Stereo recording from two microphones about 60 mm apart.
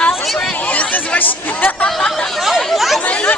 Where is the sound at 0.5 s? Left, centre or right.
Left.